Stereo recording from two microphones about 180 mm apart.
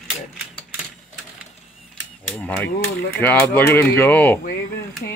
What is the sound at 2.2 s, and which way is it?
Speech, 10° left (ahead or behind).